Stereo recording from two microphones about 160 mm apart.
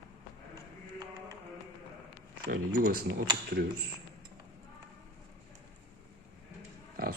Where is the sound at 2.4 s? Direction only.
75° right (ahead or behind).